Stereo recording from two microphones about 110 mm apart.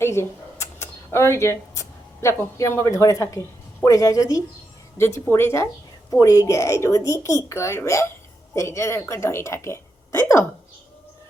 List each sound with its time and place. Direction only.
0.0 s a woman's voice: 25° left (ahead or behind)